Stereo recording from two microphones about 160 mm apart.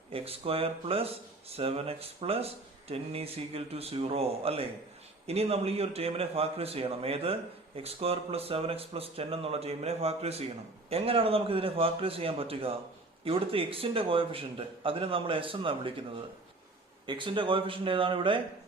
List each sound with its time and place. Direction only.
0.1 s speech: 35° right (ahead or behind)
17.1 s speech: 30° right (ahead or behind)